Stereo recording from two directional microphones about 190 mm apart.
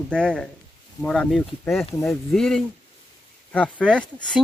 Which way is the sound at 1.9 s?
15° left (ahead or behind).